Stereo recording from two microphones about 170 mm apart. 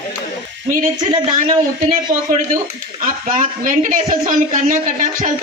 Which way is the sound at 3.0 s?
50° right (ahead or behind).